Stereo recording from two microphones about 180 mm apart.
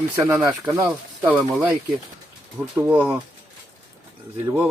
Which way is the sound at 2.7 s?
10° right (ahead or behind).